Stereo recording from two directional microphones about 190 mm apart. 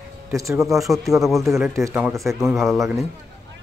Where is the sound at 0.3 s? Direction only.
15° right (ahead or behind).